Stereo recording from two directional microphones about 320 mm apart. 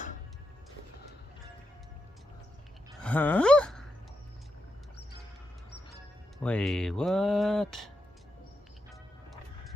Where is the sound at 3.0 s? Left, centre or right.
Centre.